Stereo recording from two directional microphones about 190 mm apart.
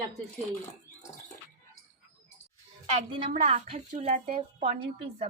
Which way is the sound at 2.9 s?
35° right (ahead or behind).